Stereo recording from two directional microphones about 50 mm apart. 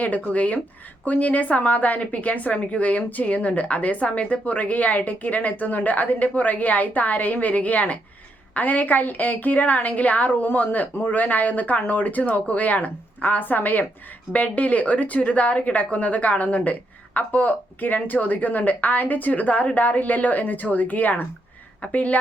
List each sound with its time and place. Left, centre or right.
0.0 s a woman's voice: left